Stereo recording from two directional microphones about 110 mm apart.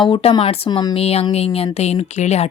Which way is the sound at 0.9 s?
65° left (ahead or behind).